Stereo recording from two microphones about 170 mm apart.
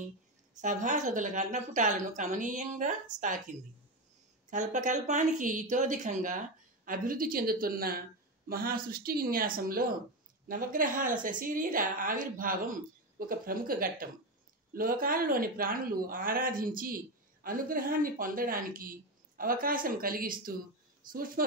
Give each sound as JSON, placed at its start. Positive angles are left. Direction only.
{"t": 0.6, "sound": "speech", "side_deg": -45}
{"t": 4.5, "sound": "speech", "side_deg": -50}